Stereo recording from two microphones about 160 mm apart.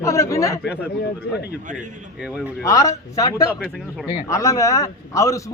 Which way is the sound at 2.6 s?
20° left (ahead or behind).